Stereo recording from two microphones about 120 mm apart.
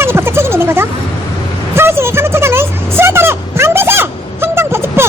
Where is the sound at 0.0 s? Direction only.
20° right (ahead or behind).